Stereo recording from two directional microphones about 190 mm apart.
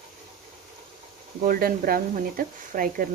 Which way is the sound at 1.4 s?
50° right (ahead or behind).